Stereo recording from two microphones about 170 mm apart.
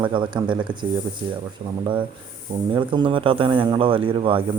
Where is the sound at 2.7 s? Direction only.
30° right (ahead or behind).